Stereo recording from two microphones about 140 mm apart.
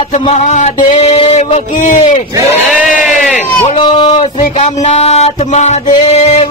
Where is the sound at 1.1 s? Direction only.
40° left (ahead or behind).